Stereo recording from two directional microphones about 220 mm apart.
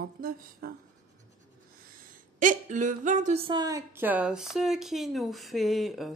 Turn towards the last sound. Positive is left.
turn(degrees=0)  # may be behind; listen again after turning